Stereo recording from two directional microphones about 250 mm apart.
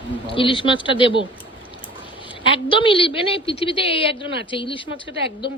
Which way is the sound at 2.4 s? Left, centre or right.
Centre.